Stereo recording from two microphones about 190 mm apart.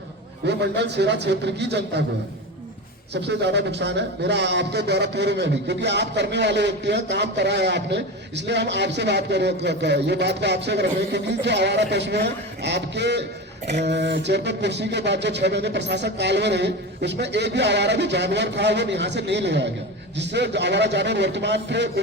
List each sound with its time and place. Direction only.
0.4 s a man's voice: 65° right (ahead or behind)
3.1 s a man's voice: 65° right (ahead or behind)